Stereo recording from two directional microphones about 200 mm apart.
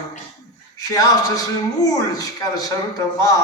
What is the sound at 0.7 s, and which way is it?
A man's voice, 20° left (ahead or behind).